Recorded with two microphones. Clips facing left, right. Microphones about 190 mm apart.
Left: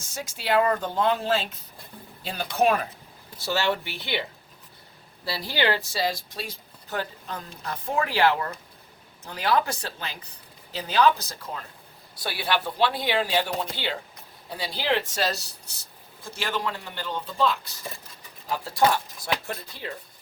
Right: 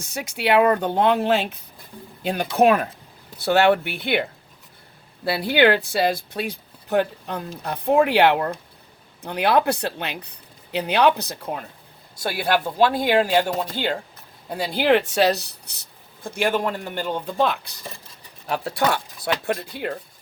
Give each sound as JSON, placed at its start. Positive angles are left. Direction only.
{"t": 0.0, "sound": "speech", "side_deg": -65}
{"t": 12.2, "sound": "speech", "side_deg": -45}